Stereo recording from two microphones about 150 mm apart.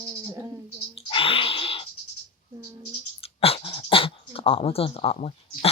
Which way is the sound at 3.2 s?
40° left (ahead or behind).